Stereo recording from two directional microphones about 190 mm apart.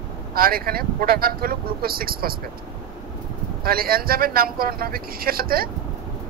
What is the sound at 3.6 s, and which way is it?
Speech, 50° right (ahead or behind).